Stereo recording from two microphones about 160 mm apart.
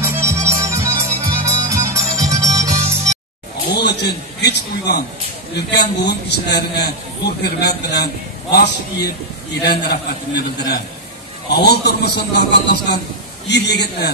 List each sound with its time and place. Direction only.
0.0 s music: 15° right (ahead or behind)
3.6 s a man's voice: 85° left